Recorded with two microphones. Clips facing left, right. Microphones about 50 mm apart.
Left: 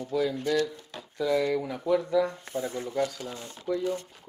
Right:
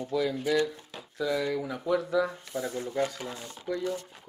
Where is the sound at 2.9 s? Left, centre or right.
Right.